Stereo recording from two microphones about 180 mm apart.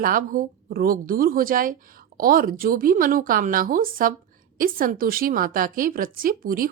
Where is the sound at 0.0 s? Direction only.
50° right (ahead or behind).